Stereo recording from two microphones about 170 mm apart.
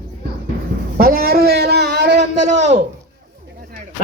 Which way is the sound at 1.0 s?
60° right (ahead or behind).